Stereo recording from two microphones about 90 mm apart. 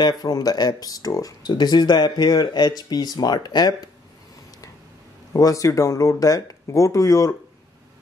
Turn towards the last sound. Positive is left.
turn(degrees=35)  # may be behind; listen again after turning